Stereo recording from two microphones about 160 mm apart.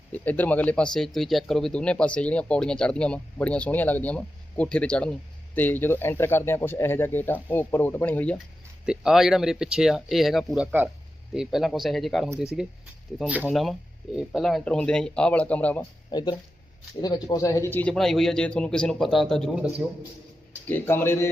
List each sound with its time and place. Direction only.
0.1 s speech: 10° left (ahead or behind)
8.9 s speech: 5° right (ahead or behind)
16.1 s speech: 25° left (ahead or behind); by 20.0 s centre (ahead or behind)
20.7 s speech: 15° left (ahead or behind)